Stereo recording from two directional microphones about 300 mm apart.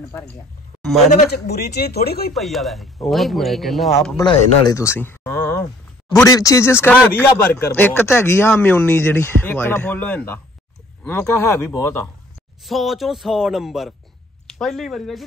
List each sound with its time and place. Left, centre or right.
1.1 s speech: left
2.3 s a man's voice: centre
4.2 s a man's voice: centre